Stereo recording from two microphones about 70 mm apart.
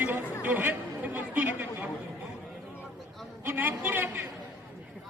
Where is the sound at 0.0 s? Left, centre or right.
Right.